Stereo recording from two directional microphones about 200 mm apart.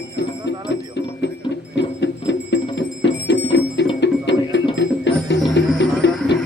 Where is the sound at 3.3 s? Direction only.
60° left (ahead or behind).